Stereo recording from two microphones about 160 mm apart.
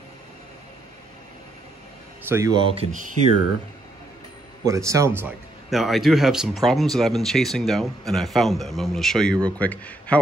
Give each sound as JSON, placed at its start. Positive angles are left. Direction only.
{"t": 2.2, "sound": "speech", "side_deg": -15}
{"t": 2.5, "sound": "speech", "side_deg": -35}
{"t": 4.6, "sound": "speech", "side_deg": -20}
{"t": 5.7, "sound": "speech", "side_deg": 0}